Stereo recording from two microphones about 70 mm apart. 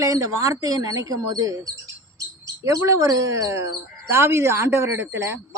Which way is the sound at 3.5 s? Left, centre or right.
Right.